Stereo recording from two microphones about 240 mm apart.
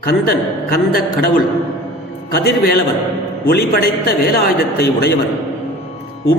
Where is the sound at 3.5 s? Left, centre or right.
Left.